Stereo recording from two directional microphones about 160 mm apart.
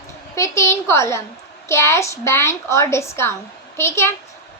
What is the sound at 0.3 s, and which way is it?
A child's voice, 20° left (ahead or behind).